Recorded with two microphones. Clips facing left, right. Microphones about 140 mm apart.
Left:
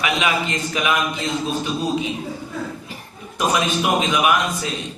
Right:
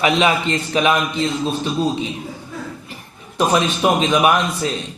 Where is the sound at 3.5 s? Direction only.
35° right (ahead or behind).